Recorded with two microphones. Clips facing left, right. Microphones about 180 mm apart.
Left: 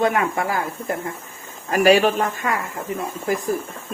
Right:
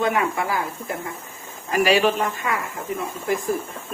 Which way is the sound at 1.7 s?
45° left (ahead or behind).